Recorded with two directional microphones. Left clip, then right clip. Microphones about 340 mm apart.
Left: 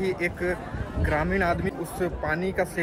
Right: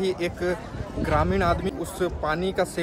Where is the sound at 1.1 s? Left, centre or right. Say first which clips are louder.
Right 2 dB; centre.